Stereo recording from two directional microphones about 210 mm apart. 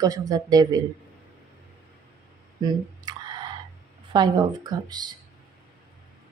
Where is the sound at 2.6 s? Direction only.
20° right (ahead or behind).